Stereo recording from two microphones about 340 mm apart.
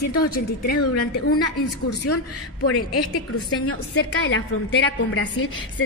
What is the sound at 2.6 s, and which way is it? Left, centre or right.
A woman's voice, left.